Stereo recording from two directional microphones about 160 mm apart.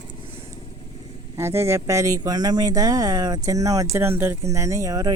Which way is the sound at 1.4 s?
15° right (ahead or behind).